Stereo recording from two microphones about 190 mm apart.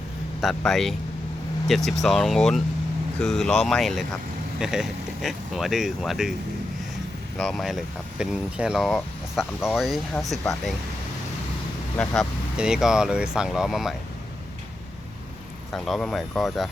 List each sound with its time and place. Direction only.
0.4 s speech: centre (ahead or behind)
7.3 s speech: centre (ahead or behind)
12.5 s speech: 5° right (ahead or behind)
15.7 s speech: centre (ahead or behind)